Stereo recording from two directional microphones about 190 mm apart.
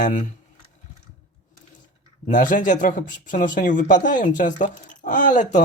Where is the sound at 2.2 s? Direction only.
45° left (ahead or behind).